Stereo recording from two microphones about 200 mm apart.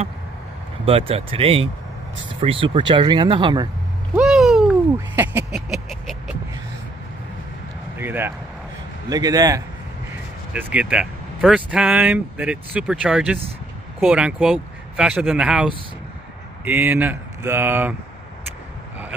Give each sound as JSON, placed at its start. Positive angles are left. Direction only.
{"t": 0.8, "sound": "speech", "side_deg": -30}
{"t": 4.1, "sound": "a sound", "side_deg": -5}
{"t": 8.0, "sound": "speech", "side_deg": -10}
{"t": 10.5, "sound": "speech", "side_deg": -5}